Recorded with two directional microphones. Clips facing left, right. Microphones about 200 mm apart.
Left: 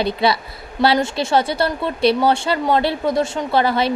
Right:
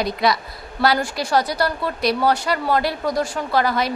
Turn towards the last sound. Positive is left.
turn(degrees=30)  # may be behind; listen again after turning